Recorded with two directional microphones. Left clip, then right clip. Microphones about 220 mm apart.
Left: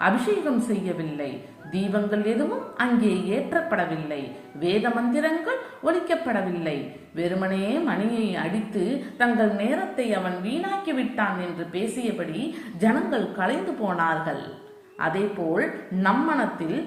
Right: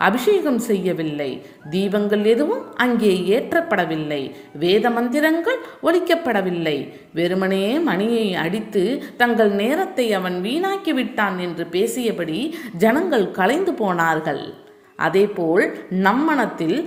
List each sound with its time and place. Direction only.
0.0 s a woman's voice: 45° right (ahead or behind)